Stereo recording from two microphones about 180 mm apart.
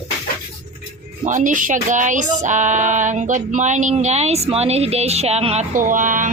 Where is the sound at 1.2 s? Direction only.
45° right (ahead or behind).